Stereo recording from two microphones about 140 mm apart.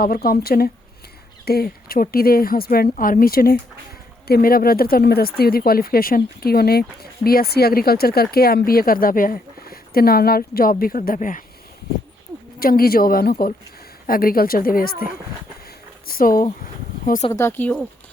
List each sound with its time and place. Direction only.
0.0 s speech: 90° left; by 11.4 s 70° left (ahead or behind)
12.5 s speech: 90° left
16.0 s speech: 90° left
17.3 s speech: 15° left (ahead or behind)